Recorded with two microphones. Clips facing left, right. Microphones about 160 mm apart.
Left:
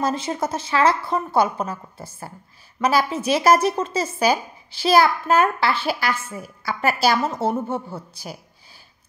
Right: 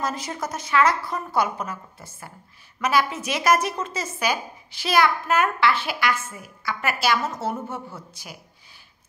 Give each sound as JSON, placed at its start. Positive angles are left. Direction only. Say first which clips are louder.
{"t": 0.0, "sound": "a woman's voice", "louder": "left 5 dB", "side_deg": 30}